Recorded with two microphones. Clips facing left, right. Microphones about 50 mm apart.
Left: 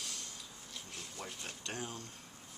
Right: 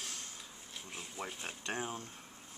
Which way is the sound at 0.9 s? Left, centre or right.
Centre.